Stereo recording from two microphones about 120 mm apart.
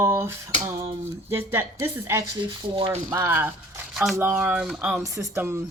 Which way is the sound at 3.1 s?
20° right (ahead or behind).